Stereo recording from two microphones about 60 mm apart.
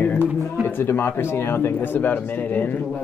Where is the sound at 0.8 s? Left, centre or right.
Left.